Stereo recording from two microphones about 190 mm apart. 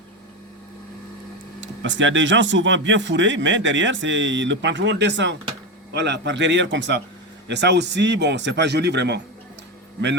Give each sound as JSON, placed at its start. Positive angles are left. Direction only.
{"t": 1.6, "sound": "speech", "side_deg": -75}